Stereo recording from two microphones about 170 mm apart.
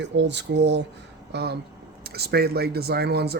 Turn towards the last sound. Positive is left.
turn(degrees=-70)  # may be behind; listen again after turning